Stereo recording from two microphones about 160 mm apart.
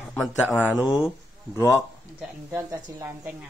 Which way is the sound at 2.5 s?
20° right (ahead or behind).